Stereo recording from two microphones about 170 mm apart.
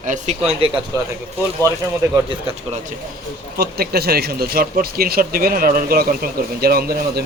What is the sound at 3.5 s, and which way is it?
Speech, 65° right (ahead or behind).